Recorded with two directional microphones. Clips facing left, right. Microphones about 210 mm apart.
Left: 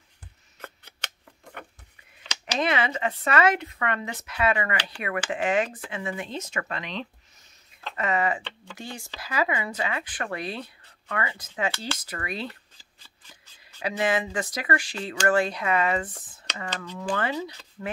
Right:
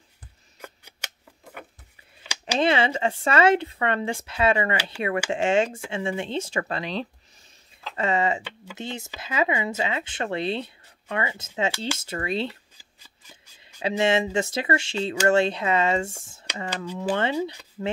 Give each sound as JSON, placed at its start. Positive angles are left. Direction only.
{"t": 0.6, "sound": "scissors", "side_deg": -10}
{"t": 2.6, "sound": "speech", "side_deg": -30}
{"t": 4.9, "sound": "speech", "side_deg": -5}
{"t": 5.3, "sound": "speech", "side_deg": -25}
{"t": 8.4, "sound": "speech", "side_deg": -10}
{"t": 8.7, "sound": "speech", "side_deg": -20}
{"t": 12.7, "sound": "shuffling cards", "side_deg": -10}
{"t": 13.8, "sound": "speech", "side_deg": -25}
{"t": 16.7, "sound": "speech", "side_deg": -10}
{"t": 17.1, "sound": "speech", "side_deg": -25}